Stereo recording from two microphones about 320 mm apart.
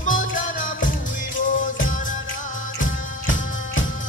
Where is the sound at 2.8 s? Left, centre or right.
Left.